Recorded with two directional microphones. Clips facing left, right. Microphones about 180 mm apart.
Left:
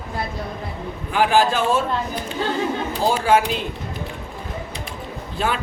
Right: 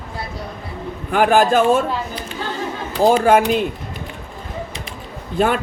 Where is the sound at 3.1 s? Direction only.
50° right (ahead or behind).